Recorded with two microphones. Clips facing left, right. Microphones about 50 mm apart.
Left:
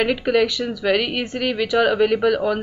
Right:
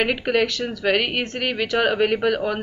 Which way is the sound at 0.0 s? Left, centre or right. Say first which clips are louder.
Left 2 dB; centre.